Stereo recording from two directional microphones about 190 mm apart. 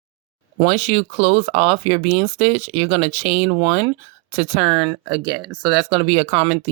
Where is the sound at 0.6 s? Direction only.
35° right (ahead or behind).